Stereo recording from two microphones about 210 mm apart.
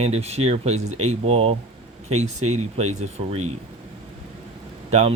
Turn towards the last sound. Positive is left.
turn(degrees=-30)  # may be behind; listen again after turning